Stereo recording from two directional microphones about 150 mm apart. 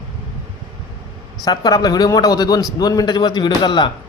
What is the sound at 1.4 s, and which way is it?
A man's voice, 25° left (ahead or behind).